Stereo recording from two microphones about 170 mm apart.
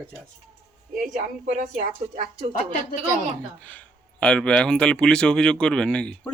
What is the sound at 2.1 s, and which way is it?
Speech, 45° right (ahead or behind).